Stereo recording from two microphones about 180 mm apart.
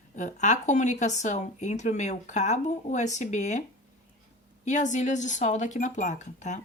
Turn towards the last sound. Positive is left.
turn(degrees=40)  # may be behind; listen again after turning